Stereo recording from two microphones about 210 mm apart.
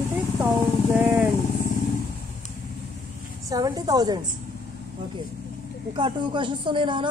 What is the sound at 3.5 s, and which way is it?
Speech, 15° right (ahead or behind).